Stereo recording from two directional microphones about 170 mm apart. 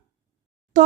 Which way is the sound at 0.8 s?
45° right (ahead or behind).